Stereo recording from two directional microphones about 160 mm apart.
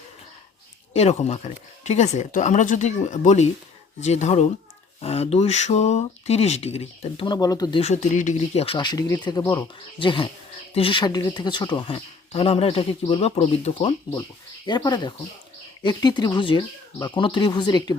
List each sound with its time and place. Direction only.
0.9 s speech: 45° left (ahead or behind); by 7.8 s 25° left (ahead or behind)
7.8 s speech: 45° left (ahead or behind)
8.6 s speech: 30° left (ahead or behind)
14.7 s speech: 25° left (ahead or behind)